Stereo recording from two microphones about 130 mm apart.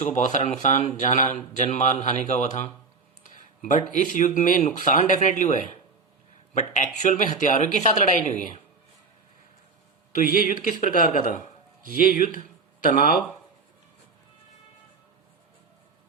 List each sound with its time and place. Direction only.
0.1 s speech: 65° left (ahead or behind)
3.2 s speech: 80° left
10.2 s speech: 90° left